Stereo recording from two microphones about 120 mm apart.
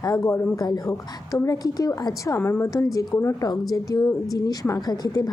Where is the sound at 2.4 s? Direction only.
20° left (ahead or behind).